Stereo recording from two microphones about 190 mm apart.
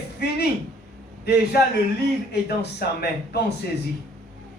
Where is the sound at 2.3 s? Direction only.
60° left (ahead or behind).